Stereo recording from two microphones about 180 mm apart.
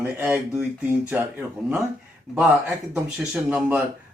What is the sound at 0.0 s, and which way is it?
Speech, 10° right (ahead or behind).